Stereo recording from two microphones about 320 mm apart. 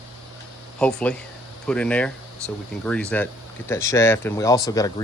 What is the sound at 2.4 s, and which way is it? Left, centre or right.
Speech, centre.